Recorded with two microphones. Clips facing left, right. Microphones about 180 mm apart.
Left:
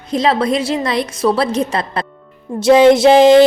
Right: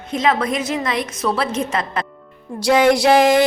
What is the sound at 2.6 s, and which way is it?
Speech, 25° left (ahead or behind).